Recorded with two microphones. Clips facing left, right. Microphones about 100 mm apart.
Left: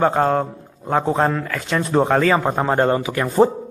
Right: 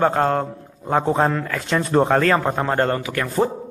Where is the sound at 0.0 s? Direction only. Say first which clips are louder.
Left 1 dB; 5° left (ahead or behind).